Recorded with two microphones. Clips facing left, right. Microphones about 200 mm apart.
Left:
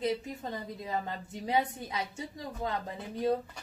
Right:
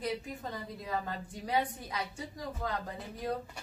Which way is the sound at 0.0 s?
25° left (ahead or behind).